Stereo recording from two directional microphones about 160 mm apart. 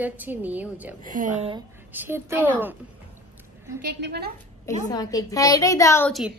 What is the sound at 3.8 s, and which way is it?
Speech, 90° right.